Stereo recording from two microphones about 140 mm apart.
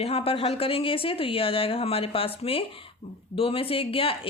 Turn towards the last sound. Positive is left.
turn(degrees=40)  # may be behind; listen again after turning